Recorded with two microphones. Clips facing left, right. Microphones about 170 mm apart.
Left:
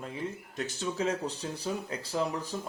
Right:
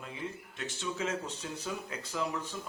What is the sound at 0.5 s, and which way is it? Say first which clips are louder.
A man's voice: left 5 dB; 40° left (ahead or behind).